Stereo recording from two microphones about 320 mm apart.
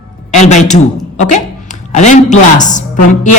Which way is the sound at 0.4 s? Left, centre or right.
Left.